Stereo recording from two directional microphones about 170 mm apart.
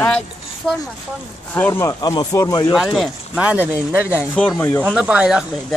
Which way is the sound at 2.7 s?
Centre (ahead or behind).